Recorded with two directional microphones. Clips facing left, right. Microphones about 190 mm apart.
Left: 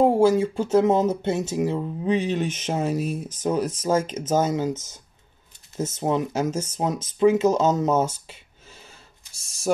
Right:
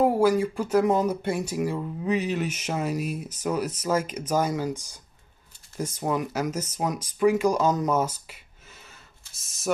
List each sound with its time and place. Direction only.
0.0 s speech: 25° left (ahead or behind)